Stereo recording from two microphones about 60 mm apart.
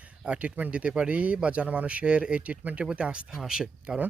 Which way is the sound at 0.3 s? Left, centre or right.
Right.